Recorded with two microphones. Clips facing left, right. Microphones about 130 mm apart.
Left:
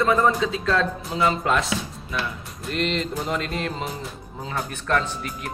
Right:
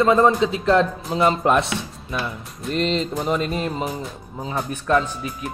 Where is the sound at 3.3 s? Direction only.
25° right (ahead or behind).